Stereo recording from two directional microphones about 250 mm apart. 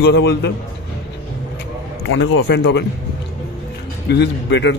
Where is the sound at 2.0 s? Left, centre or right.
Left.